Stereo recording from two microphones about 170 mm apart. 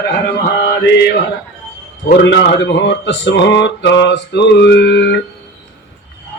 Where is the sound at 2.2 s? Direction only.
90° left.